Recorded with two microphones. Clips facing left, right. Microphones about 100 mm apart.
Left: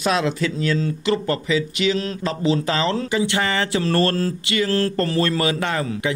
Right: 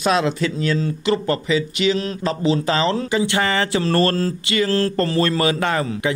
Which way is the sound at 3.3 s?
45° right (ahead or behind).